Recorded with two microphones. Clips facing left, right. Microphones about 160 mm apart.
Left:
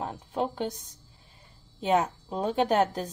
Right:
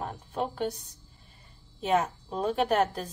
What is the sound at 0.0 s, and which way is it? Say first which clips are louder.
Speech: left 2 dB; 20° left (ahead or behind).